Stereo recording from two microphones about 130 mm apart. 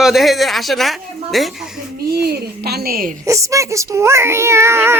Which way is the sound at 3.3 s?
25° right (ahead or behind).